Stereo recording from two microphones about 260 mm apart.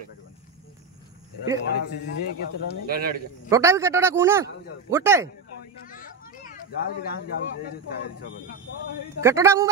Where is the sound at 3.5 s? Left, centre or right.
Centre.